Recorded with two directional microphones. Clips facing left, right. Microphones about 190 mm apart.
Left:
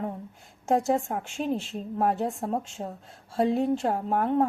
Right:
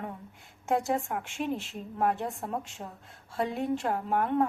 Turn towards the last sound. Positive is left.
turn(degrees=35)  # may be behind; listen again after turning